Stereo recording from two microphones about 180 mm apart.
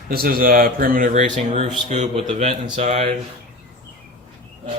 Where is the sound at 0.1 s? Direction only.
55° right (ahead or behind); by 3.1 s 40° right (ahead or behind).